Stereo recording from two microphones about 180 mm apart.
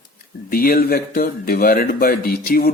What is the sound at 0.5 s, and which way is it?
A man's voice, 55° left (ahead or behind).